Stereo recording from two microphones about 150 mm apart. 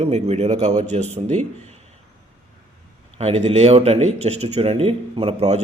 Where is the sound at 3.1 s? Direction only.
45° right (ahead or behind).